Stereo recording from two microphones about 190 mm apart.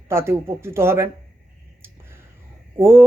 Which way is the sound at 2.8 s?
10° right (ahead or behind).